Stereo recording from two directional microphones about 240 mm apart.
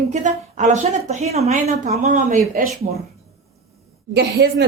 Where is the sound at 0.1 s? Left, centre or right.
Right.